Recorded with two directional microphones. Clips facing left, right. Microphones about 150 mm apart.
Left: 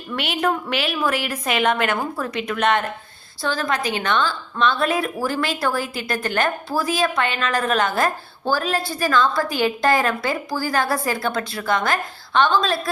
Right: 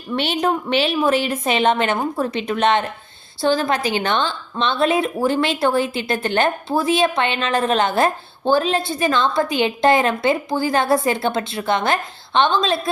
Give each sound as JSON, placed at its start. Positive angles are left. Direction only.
{"t": 0.2, "sound": "a woman's voice", "side_deg": -30}